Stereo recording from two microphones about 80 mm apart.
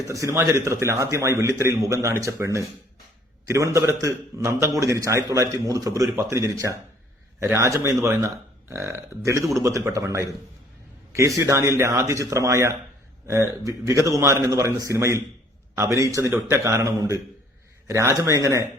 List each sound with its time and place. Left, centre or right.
0.1 s a man's voice: right
11.3 s a man's voice: right
16.2 s a man's voice: right